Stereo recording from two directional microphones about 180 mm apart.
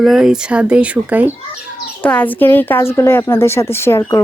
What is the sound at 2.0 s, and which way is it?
A woman's voice, 10° left (ahead or behind).